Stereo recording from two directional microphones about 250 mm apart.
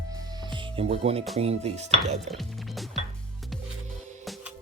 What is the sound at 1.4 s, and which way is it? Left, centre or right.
Speech, right.